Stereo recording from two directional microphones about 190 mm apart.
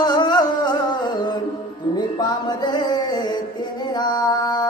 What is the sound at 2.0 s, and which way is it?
Music, 20° left (ahead or behind).